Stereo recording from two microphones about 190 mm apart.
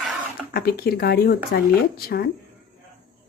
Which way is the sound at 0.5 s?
55° left (ahead or behind).